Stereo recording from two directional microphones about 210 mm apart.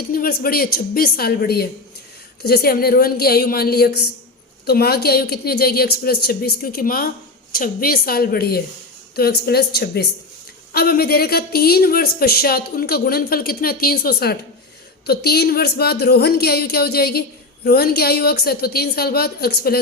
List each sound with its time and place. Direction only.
0.1 s a woman's voice: 45° left (ahead or behind)